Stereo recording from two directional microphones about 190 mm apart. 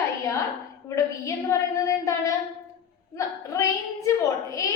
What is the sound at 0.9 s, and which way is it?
A woman's voice, 15° left (ahead or behind).